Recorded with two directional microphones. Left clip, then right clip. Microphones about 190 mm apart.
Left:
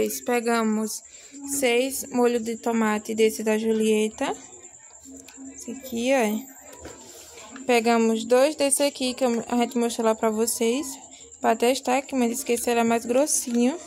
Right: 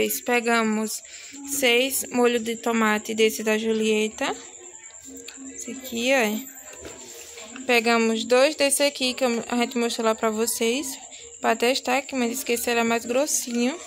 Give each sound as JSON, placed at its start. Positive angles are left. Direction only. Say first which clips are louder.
{"t": 0.0, "sound": "speech", "louder": "right 1 dB", "side_deg": 10}
{"t": 5.9, "sound": "speech", "louder": "right 1 dB", "side_deg": 15}
{"t": 7.6, "sound": "speech", "louder": "even", "side_deg": 20}